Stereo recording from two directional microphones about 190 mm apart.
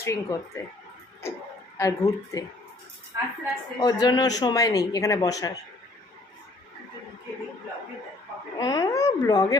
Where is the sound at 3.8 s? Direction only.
20° left (ahead or behind).